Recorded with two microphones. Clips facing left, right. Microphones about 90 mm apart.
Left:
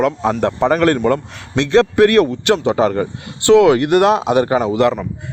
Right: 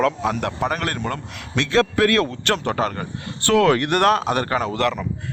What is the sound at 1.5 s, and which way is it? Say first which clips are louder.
A man's voice: left 6 dB; 20° left (ahead or behind).